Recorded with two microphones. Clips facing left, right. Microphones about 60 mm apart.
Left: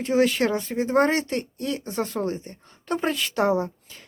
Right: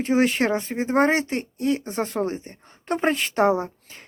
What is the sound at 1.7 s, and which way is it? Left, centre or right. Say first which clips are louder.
A woman's voice: right 2 dB; right.